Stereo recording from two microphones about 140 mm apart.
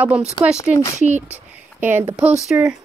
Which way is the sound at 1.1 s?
15° right (ahead or behind).